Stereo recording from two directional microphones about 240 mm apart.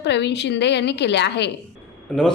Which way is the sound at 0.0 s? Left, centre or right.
Left.